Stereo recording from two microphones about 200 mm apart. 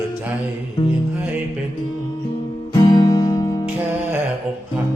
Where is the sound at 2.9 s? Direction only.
20° left (ahead or behind).